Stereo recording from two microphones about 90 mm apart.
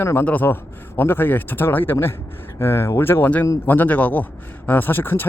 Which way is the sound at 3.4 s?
35° left (ahead or behind).